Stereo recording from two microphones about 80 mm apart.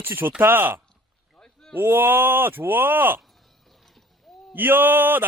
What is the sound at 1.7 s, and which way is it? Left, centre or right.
Speech, right.